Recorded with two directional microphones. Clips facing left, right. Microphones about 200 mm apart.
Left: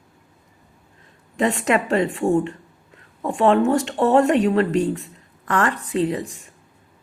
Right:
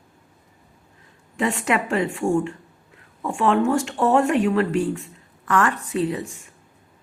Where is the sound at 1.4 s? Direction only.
40° left (ahead or behind).